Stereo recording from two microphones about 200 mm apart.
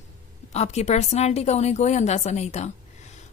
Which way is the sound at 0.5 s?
35° left (ahead or behind).